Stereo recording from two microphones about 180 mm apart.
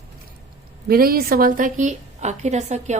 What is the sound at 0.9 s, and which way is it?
A woman's voice, 55° right (ahead or behind).